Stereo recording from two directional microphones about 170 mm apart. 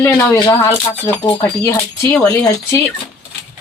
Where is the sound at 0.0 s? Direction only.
10° left (ahead or behind).